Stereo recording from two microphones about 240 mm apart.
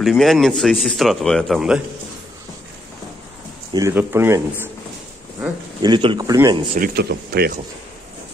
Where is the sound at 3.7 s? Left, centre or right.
Centre.